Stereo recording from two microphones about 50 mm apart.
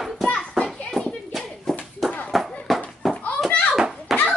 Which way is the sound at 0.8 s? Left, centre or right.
Centre.